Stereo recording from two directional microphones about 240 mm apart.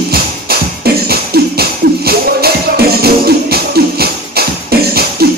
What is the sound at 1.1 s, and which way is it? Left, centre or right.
Music, right.